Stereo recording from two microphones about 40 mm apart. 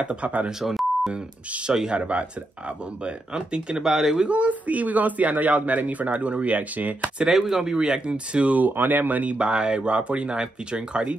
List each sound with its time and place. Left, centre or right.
0.0 s speech: right
0.6 s beep: centre
1.7 s speech: centre
2.0 s speech: right
3.3 s speech: right
3.8 s speech: centre
4.3 s speech: right
7.2 s speech: centre
7.7 s speech: centre; by 8.7 s right
8.7 s speech: right